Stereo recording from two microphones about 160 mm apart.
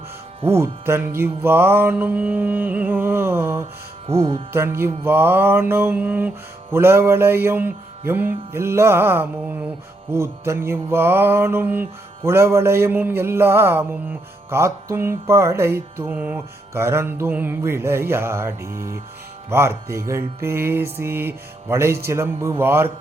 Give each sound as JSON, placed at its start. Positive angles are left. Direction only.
{"t": 0.5, "sound": "mantra", "side_deg": -15}